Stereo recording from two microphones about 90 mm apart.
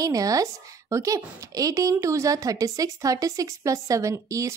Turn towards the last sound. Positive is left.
turn(degrees=-35)  # may be behind; listen again after turning